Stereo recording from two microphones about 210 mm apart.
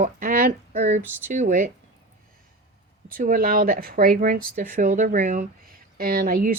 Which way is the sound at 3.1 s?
40° right (ahead or behind).